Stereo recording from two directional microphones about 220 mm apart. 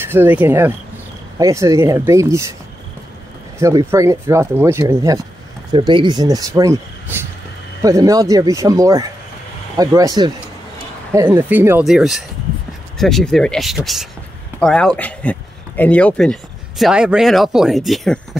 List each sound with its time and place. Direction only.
0.0 s speech: 10° right (ahead or behind)
3.5 s speech: 15° right (ahead or behind)